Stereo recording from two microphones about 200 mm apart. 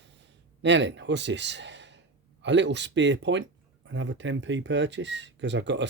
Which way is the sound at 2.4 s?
60° right (ahead or behind).